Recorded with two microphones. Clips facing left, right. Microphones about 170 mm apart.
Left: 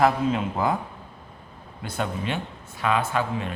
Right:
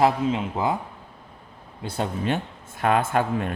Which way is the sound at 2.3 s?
50° right (ahead or behind).